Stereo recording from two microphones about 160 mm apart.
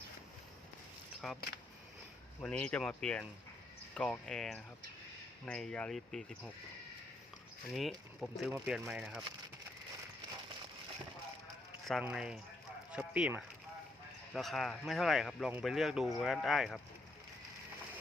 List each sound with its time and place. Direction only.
1.2 s speech: centre (ahead or behind)
2.4 s speech: 5° left (ahead or behind)
7.7 s speech: centre (ahead or behind)
12.1 s speech: 5° right (ahead or behind)